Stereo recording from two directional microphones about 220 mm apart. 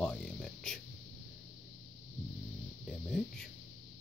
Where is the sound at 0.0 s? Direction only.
5° left (ahead or behind).